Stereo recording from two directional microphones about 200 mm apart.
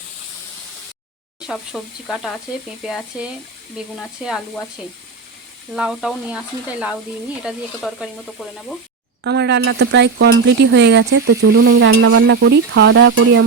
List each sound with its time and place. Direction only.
1.4 s sizzle: centre (ahead or behind)
5.7 s sizzle: 5° right (ahead or behind)
9.2 s speech: 60° right (ahead or behind); by 13.4 s 75° right (ahead or behind)